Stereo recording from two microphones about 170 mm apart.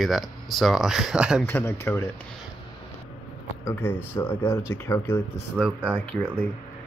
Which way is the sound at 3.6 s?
15° left (ahead or behind).